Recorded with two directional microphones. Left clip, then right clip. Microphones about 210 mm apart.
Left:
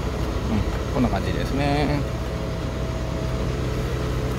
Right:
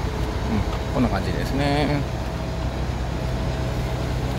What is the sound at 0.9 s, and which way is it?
Speech, centre (ahead or behind).